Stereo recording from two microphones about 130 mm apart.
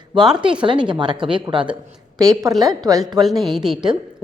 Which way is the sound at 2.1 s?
30° right (ahead or behind).